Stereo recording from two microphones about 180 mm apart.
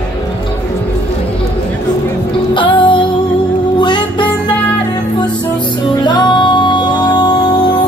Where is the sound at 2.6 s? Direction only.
25° left (ahead or behind).